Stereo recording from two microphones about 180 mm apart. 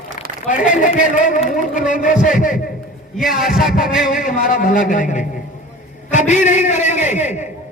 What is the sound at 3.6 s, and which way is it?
A man's voice, 50° left (ahead or behind).